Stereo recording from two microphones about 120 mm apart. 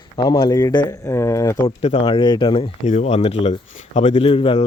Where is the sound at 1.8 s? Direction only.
60° left (ahead or behind).